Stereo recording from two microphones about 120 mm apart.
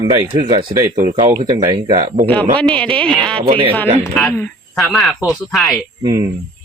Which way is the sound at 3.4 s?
50° right (ahead or behind).